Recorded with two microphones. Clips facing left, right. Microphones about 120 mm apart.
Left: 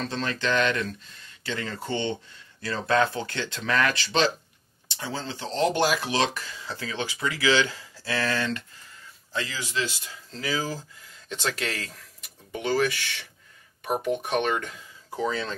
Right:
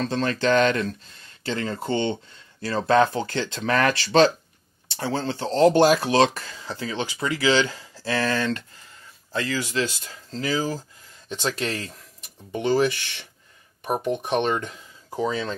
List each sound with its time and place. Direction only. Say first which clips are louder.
0.0 s speech: right 6 dB; 40° right (ahead or behind)
11.2 s speech: right 3 dB; 20° right (ahead or behind)
14.2 s speech: right 3 dB; 20° right (ahead or behind)